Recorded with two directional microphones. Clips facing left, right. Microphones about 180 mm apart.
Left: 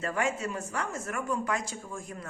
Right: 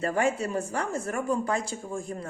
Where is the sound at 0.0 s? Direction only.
35° right (ahead or behind).